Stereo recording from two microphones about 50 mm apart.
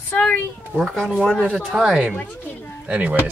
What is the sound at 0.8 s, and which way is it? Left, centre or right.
Speech, centre.